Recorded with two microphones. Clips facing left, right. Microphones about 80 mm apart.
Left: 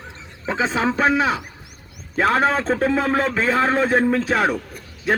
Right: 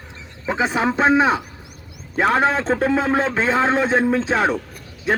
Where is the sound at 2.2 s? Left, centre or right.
Centre.